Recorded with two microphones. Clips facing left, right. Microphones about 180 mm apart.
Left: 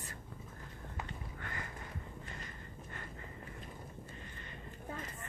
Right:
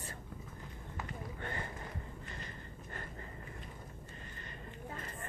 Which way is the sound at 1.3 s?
30° right (ahead or behind).